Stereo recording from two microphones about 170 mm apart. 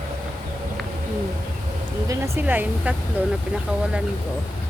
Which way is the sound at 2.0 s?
15° right (ahead or behind).